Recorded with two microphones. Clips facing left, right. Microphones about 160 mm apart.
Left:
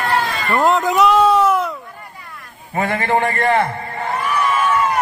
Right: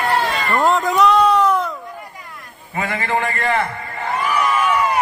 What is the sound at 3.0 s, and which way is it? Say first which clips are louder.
Speech: left 3 dB; 30° left (ahead or behind).